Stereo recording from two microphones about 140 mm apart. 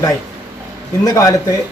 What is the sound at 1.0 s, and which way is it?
Speech, 25° left (ahead or behind).